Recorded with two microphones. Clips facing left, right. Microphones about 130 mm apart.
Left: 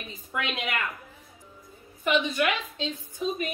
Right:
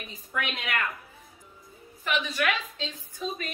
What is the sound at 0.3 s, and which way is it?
Speech, 20° left (ahead or behind).